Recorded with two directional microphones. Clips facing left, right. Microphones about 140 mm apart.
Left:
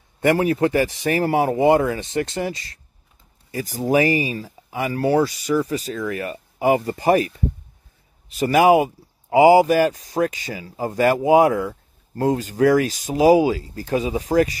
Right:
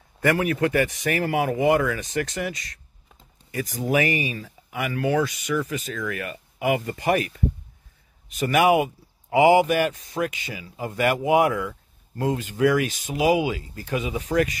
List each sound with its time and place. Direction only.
0.2 s speech: 25° left (ahead or behind)